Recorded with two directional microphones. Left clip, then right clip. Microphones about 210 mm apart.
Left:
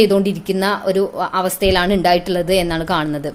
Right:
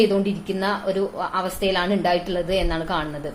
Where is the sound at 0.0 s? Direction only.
50° left (ahead or behind).